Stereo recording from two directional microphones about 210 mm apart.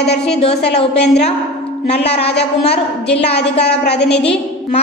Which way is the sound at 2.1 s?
50° left (ahead or behind).